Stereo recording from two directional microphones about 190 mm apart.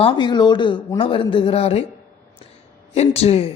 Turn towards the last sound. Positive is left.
turn(degrees=30)  # may be behind; listen again after turning